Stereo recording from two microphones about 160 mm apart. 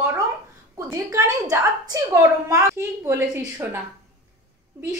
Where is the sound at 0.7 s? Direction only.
20° right (ahead or behind).